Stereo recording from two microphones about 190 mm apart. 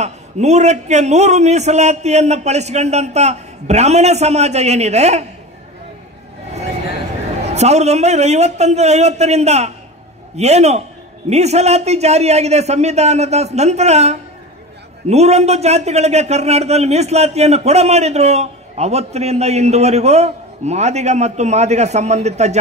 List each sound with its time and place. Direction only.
0.0 s a man's voice: 35° right (ahead or behind)
7.4 s a man's voice: 35° right (ahead or behind)